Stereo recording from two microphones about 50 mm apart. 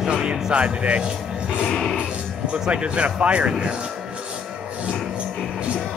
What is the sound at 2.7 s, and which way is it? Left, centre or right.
Speech, right.